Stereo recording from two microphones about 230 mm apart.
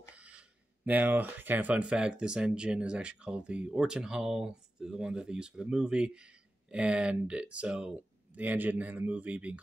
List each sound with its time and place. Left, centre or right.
0.1 s speech: centre